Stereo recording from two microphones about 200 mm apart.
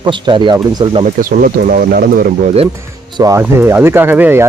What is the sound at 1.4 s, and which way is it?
Speech, 45° right (ahead or behind).